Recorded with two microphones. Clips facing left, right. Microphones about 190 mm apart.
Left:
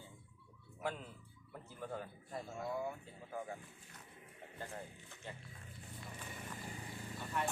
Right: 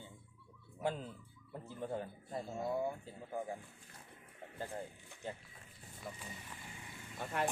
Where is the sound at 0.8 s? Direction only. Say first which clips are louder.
Right 4 dB; 30° right (ahead or behind).